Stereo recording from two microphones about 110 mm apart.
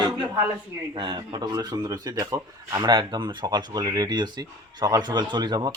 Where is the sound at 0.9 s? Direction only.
45° right (ahead or behind).